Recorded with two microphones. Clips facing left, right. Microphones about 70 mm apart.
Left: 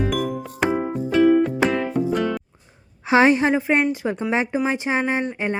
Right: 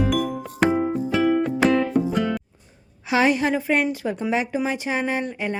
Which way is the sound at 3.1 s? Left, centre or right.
Left.